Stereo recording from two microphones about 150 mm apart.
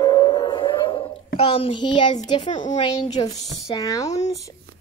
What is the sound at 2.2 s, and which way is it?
A woman's voice, 30° left (ahead or behind).